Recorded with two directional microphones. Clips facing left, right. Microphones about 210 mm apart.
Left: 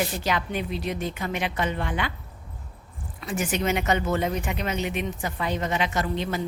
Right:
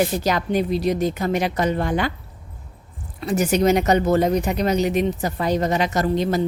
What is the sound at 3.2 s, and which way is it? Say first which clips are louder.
Speech: right 8 dB; 40° right (ahead or behind).